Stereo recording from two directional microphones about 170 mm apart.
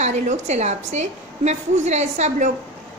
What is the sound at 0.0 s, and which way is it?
A woman's voice, 45° right (ahead or behind).